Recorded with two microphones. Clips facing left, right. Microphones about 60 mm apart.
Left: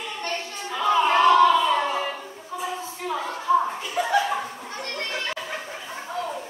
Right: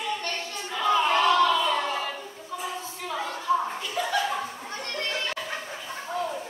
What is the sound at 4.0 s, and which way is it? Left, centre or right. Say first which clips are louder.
Chuckle: left 4 dB; centre.